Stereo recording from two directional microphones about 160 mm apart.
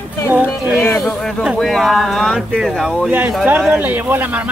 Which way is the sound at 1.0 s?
5° left (ahead or behind).